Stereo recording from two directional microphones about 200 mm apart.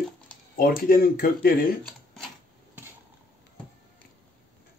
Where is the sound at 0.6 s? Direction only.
45° left (ahead or behind).